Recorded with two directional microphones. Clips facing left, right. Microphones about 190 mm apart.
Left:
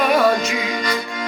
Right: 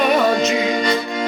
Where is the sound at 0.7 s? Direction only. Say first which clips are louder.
Right 5 dB; 25° right (ahead or behind).